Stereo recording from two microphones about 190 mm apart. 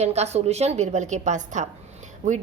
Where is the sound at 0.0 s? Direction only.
35° right (ahead or behind).